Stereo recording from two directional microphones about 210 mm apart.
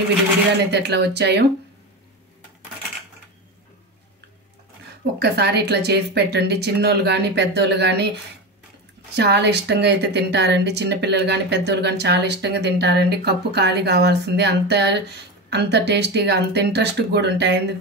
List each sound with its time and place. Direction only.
0.7 s a woman's voice: 55° right (ahead or behind)
5.2 s a woman's voice: 50° right (ahead or behind)
9.1 s a woman's voice: 55° right (ahead or behind)